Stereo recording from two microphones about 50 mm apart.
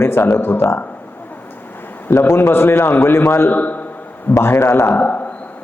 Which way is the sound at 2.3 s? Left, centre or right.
Left.